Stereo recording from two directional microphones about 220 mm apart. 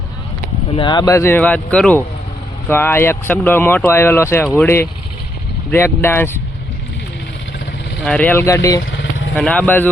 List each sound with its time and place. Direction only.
0.8 s speech: 20° left (ahead or behind)
8.0 s speech: 5° left (ahead or behind)
8.8 s vehicle: 55° left (ahead or behind)
9.3 s speech: 5° left (ahead or behind)